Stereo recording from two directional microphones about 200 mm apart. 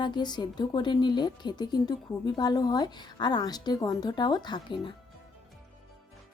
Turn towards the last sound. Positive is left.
turn(degrees=25)  # may be behind; listen again after turning